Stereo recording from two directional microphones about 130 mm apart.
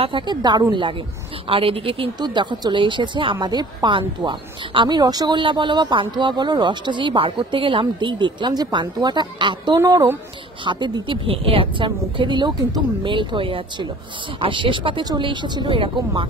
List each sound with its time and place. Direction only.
0.0 s a woman's voice: 35° right (ahead or behind)
10.6 s a woman's voice: 40° right (ahead or behind)